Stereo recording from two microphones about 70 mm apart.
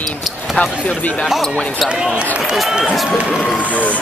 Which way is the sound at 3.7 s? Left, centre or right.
Left.